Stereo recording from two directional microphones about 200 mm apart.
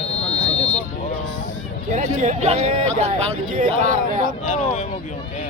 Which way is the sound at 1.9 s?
40° right (ahead or behind).